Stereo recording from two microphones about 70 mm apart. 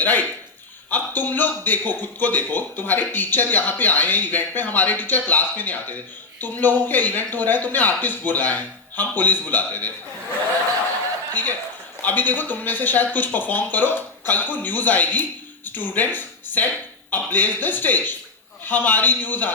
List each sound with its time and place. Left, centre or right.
0.0 s a man's voice: left
12.0 s a man's voice: left